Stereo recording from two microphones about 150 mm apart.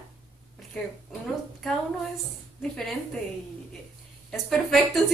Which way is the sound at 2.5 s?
5° left (ahead or behind).